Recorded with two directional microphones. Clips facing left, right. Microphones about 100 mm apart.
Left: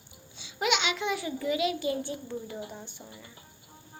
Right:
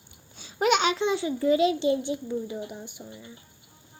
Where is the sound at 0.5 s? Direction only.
40° right (ahead or behind); by 3.2 s 15° right (ahead or behind).